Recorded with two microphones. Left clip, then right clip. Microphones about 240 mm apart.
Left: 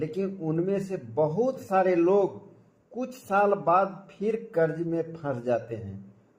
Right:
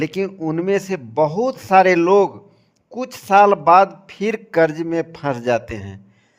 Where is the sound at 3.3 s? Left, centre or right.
Right.